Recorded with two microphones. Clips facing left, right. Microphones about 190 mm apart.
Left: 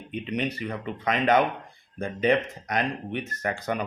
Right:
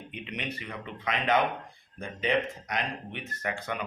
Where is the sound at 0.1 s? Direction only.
40° left (ahead or behind).